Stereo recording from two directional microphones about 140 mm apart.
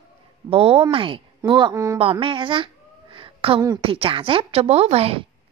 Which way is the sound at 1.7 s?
20° right (ahead or behind).